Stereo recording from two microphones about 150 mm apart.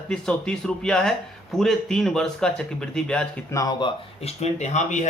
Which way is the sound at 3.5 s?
25° left (ahead or behind).